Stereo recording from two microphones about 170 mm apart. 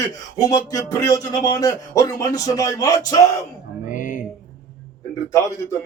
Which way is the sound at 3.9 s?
50° left (ahead or behind).